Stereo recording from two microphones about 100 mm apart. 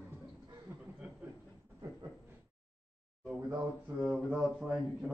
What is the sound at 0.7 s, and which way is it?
Chuckle, 25° right (ahead or behind).